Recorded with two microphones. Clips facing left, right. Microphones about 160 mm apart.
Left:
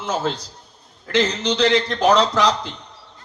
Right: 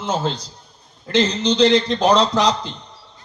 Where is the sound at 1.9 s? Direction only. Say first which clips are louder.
Right 1 dB; 15° right (ahead or behind).